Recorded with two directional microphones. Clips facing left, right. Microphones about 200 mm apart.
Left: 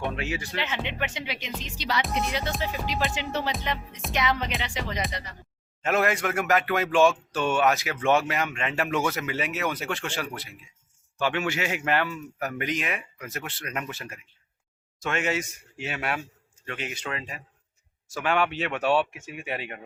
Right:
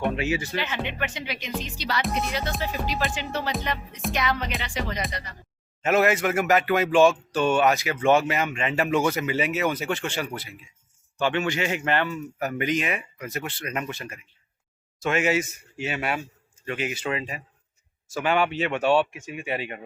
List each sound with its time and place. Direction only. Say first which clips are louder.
0.0 s speech: right 5 dB; 5° right (ahead or behind)
0.6 s speech: right 1 dB; 20° left (ahead or behind)
5.8 s speech: right 4 dB; 5° right (ahead or behind)